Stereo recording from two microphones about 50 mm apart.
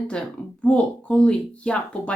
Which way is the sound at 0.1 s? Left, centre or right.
Left.